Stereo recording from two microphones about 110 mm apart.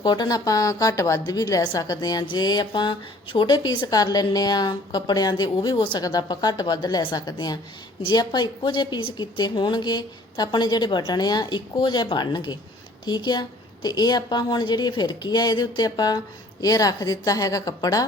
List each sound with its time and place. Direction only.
0.0 s a woman's voice: 40° left (ahead or behind)
6.0 s a woman's voice: 35° left (ahead or behind)